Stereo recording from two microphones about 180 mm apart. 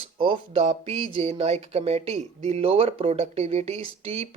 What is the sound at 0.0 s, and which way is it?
Speech, 30° right (ahead or behind).